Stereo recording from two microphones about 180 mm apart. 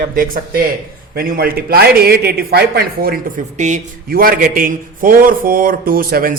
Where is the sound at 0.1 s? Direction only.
50° right (ahead or behind).